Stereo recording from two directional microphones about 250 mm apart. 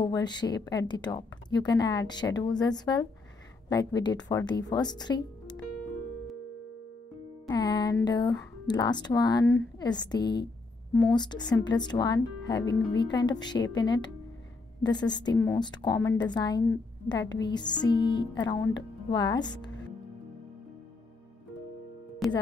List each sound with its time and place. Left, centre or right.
0.0 s a woman's voice: centre
7.4 s a woman's voice: centre
22.2 s music: centre